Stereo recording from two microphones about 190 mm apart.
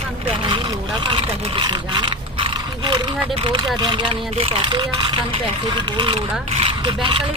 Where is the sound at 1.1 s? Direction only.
25° right (ahead or behind).